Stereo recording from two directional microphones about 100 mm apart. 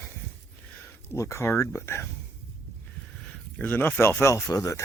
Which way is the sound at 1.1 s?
30° left (ahead or behind).